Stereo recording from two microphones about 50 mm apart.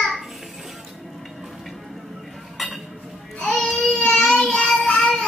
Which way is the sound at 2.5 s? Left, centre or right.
Centre.